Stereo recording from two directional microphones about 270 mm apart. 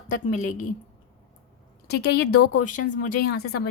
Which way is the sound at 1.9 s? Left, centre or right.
Left.